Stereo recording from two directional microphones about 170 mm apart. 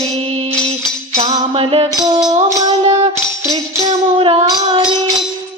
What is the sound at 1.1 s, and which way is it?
Music, 40° right (ahead or behind).